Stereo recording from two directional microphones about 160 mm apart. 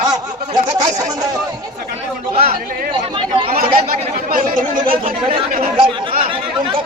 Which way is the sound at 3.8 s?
60° right (ahead or behind).